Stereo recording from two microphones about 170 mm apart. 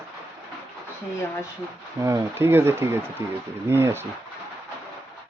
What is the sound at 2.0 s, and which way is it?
Speech, 20° right (ahead or behind).